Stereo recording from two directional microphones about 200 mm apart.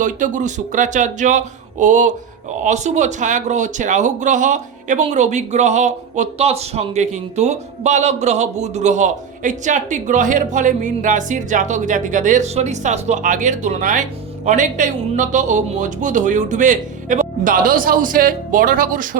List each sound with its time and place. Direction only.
0.0 s speech: 40° right (ahead or behind)